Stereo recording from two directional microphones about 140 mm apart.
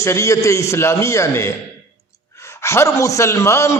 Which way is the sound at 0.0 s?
20° left (ahead or behind).